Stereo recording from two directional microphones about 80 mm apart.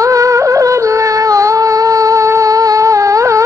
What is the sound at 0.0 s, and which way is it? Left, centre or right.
Music, right.